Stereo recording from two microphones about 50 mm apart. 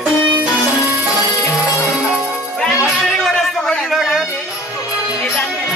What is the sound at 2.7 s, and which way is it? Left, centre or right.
Music, centre.